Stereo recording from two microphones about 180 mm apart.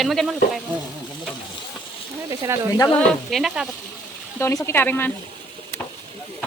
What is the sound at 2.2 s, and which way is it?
Speech, 15° right (ahead or behind).